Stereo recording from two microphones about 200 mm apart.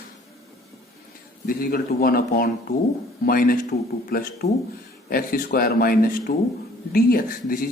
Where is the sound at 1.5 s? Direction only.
45° left (ahead or behind).